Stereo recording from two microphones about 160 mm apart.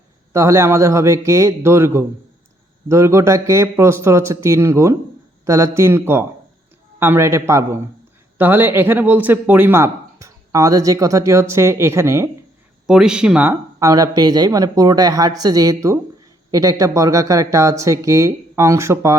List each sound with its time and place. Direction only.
0.3 s speech: 20° right (ahead or behind)
12.9 s speech: 5° right (ahead or behind)